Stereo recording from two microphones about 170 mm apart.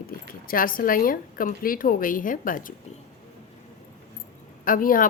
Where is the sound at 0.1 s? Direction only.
55° left (ahead or behind).